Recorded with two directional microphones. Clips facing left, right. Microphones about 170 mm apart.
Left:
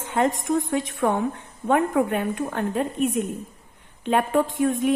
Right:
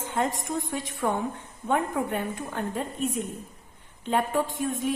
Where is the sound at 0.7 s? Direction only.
70° left (ahead or behind).